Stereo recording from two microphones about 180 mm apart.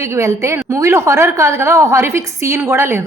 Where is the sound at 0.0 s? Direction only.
15° right (ahead or behind).